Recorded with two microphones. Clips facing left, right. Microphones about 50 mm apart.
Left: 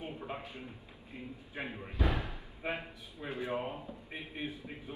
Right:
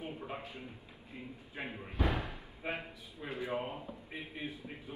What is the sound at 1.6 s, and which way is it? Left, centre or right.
Speech, centre.